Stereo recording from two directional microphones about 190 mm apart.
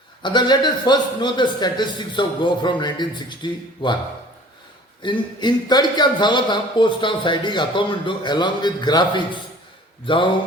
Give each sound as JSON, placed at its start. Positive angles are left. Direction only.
{"t": 0.2, "sound": "speech", "side_deg": 25}
{"t": 5.0, "sound": "speech", "side_deg": 25}